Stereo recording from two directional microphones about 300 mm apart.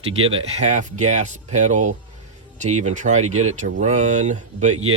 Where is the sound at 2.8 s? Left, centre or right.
Right.